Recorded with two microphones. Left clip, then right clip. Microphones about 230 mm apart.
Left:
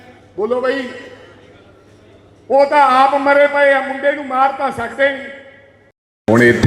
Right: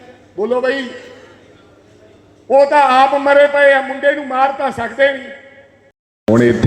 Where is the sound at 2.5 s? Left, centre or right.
Right.